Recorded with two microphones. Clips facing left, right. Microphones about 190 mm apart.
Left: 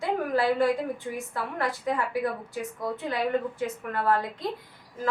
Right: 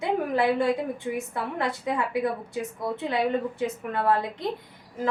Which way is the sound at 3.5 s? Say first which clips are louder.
Right 2 dB; 20° right (ahead or behind).